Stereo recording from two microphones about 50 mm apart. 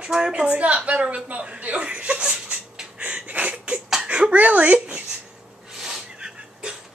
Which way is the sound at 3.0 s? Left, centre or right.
Right.